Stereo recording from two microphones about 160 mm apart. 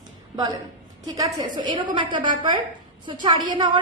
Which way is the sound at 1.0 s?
25° right (ahead or behind).